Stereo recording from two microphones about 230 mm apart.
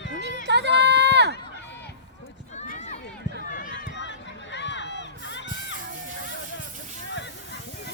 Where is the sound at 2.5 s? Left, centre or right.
Left.